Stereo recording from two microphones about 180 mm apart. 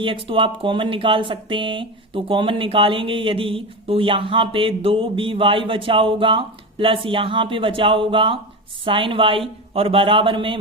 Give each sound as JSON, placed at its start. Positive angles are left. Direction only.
{"t": 0.0, "sound": "speech", "side_deg": -30}